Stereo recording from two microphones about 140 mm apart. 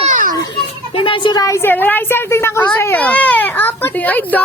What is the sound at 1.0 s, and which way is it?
A woman's voice, 40° left (ahead or behind).